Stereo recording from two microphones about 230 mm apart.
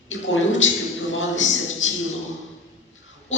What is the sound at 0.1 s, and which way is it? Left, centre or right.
A man's voice, left.